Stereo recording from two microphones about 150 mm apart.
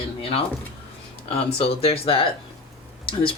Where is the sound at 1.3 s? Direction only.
40° left (ahead or behind).